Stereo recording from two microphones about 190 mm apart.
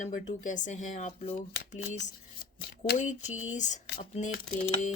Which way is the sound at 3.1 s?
40° left (ahead or behind).